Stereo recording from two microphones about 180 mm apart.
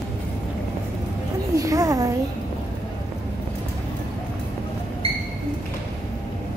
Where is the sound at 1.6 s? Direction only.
20° right (ahead or behind).